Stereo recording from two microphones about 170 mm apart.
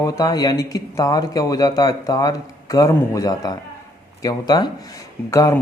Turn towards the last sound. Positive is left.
turn(degrees=20)  # may be behind; listen again after turning